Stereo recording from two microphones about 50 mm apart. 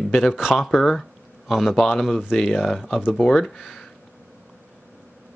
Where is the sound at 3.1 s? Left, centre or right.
Centre.